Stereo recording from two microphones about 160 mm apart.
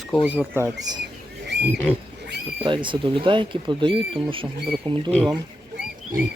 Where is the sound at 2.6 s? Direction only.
30° right (ahead or behind).